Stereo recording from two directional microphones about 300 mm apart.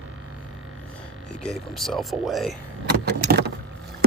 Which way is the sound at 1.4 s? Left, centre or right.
Centre.